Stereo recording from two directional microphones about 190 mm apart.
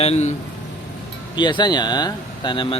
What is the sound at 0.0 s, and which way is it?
Speech, 35° left (ahead or behind).